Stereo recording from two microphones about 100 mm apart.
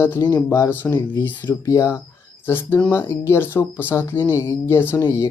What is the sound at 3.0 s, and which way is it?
Speech, 30° left (ahead or behind).